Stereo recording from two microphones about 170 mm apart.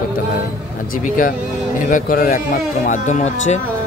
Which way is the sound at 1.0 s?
55° left (ahead or behind).